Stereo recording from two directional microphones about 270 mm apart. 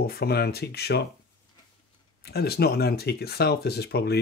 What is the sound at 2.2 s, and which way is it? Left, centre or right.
Speech, left.